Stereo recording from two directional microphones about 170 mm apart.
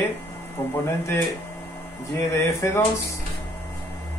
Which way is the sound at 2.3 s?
15° left (ahead or behind).